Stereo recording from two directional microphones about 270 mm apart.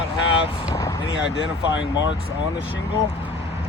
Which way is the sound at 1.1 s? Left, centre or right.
Left.